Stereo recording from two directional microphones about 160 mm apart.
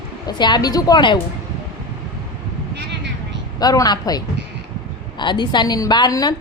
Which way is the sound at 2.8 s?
90° right.